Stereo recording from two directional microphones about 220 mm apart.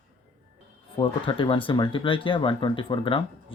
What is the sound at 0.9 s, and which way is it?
Speech, 25° left (ahead or behind).